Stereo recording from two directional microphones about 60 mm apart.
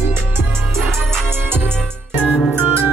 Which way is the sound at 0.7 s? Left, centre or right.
Centre.